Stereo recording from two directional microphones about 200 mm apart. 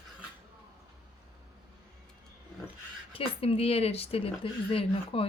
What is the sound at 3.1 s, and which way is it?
A woman's voice, 30° left (ahead or behind).